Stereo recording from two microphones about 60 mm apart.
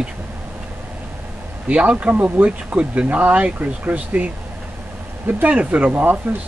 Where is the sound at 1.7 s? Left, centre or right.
Right.